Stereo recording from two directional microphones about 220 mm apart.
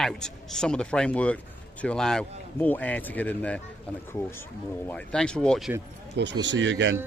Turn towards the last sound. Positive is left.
turn(degrees=-55)  # may be behind; listen again after turning